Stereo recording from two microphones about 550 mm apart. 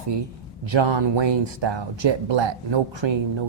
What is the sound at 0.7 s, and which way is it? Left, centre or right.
Speech, right.